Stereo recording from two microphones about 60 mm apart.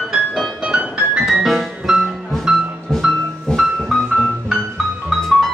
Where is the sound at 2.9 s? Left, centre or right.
Centre.